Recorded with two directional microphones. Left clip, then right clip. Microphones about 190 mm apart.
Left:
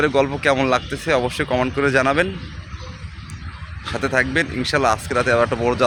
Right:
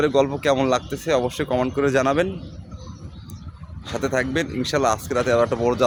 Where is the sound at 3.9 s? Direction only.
5° right (ahead or behind).